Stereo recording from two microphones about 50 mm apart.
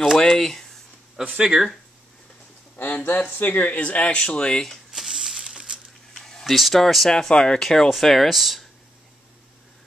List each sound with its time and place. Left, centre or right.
0.2 s speech: centre
1.4 s speech: centre
2.8 s speech: left; by 4.6 s centre
4.9 s a sound: centre
6.1 s speech: centre